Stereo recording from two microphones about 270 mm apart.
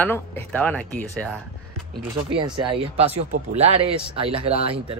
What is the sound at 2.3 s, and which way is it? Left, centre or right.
Speech, centre.